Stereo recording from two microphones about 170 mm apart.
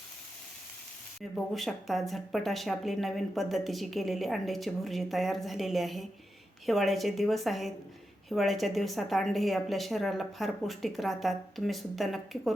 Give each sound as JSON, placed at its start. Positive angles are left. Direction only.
{"t": 1.5, "sound": "speech", "side_deg": 0}